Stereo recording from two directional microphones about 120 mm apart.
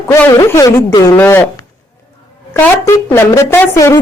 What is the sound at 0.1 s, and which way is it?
A woman's voice, 25° left (ahead or behind).